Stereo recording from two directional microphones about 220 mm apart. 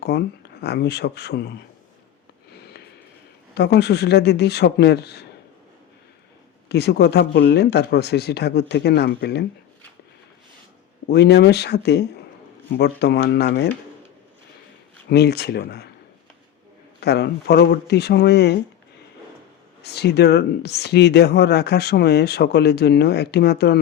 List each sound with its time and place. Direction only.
0.0 s speech: 50° left (ahead or behind)
3.5 s speech: 50° left (ahead or behind)
6.7 s speech: 50° left (ahead or behind)
11.1 s speech: 50° left (ahead or behind)
15.1 s speech: 45° left (ahead or behind)
17.0 s speech: 45° left (ahead or behind)
19.8 s speech: 50° left (ahead or behind)